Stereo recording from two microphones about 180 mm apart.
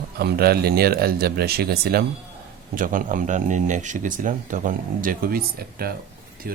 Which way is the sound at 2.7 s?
50° right (ahead or behind).